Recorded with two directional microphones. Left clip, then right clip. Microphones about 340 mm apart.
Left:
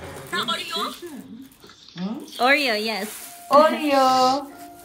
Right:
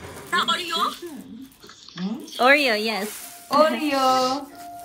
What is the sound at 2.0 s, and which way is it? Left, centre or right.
Speech, centre.